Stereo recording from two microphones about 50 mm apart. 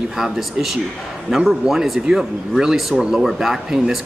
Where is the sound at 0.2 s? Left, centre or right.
Centre.